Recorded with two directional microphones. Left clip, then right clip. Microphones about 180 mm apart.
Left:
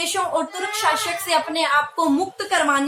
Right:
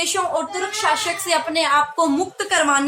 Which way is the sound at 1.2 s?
15° right (ahead or behind).